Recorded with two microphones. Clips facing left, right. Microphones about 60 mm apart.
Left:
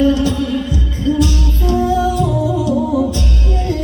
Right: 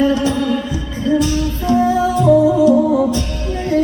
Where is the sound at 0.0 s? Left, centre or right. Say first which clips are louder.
Left 1 dB; right.